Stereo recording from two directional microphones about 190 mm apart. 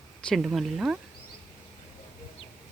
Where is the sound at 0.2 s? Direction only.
Centre (ahead or behind).